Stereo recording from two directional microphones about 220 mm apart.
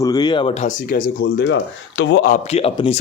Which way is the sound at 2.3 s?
25° left (ahead or behind).